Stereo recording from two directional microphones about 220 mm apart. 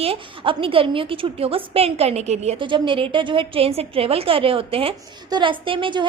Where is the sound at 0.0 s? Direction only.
25° right (ahead or behind).